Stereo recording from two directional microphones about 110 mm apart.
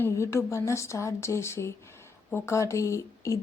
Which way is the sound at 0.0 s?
25° left (ahead or behind).